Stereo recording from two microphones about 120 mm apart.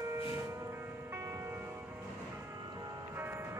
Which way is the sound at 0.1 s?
25° right (ahead or behind).